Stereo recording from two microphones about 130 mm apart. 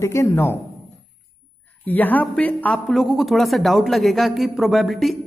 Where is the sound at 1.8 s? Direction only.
15° left (ahead or behind).